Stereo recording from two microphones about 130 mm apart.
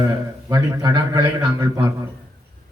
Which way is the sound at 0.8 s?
25° right (ahead or behind).